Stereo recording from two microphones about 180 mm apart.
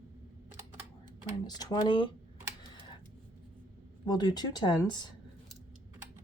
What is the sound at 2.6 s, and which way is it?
Typing, 25° left (ahead or behind).